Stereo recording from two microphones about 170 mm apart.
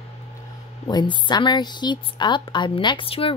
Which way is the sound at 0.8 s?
25° left (ahead or behind).